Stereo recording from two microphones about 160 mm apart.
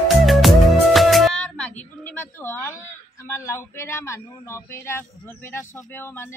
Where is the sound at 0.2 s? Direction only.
Centre (ahead or behind).